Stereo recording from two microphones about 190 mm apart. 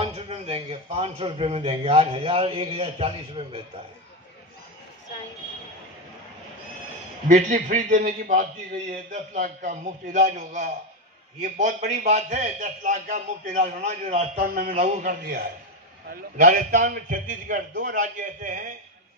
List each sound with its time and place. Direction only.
0.0 s a man's voice: 30° right (ahead or behind)
7.2 s a man's voice: 40° right (ahead or behind)